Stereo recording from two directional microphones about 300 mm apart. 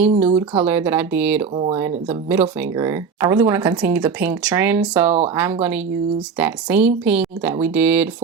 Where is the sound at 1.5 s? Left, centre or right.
Centre.